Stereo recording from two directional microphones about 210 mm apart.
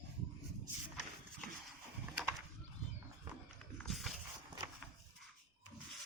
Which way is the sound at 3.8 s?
Centre (ahead or behind).